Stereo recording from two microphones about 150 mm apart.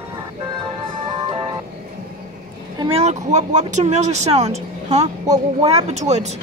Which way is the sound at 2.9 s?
45° right (ahead or behind).